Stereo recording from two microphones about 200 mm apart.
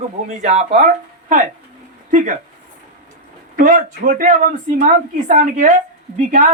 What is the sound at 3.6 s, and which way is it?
Speech, 40° right (ahead or behind).